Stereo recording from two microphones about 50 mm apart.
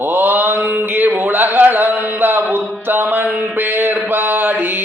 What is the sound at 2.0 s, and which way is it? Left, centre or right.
Music, right.